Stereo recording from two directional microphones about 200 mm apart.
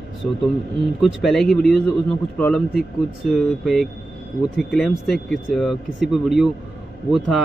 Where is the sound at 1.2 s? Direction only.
Centre (ahead or behind).